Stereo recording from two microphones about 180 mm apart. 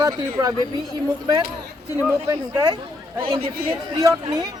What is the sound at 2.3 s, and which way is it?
Speech, 25° right (ahead or behind).